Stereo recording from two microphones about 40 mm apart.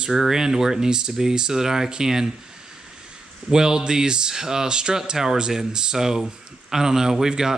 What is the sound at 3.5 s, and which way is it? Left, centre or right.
Speech, centre.